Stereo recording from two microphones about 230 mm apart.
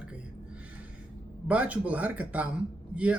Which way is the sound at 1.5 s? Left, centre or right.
Centre.